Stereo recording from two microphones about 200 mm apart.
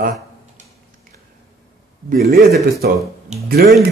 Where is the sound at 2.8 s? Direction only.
50° right (ahead or behind).